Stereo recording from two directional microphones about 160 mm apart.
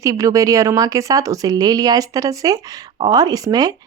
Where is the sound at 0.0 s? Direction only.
20° right (ahead or behind).